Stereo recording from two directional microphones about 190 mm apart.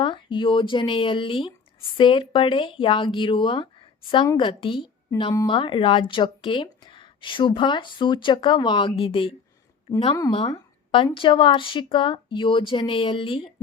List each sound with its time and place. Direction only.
0.0 s speech: 25° left (ahead or behind)